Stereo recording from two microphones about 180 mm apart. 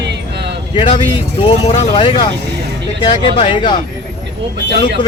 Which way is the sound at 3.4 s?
25° left (ahead or behind).